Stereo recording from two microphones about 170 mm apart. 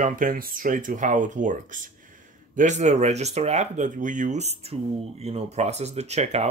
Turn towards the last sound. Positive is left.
turn(degrees=-40)  # may be behind; listen again after turning